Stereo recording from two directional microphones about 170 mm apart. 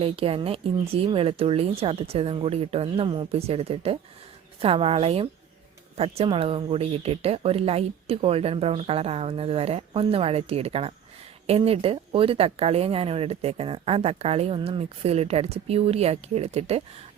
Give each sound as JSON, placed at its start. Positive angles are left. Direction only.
{"t": 0.0, "sound": "speech", "side_deg": -35}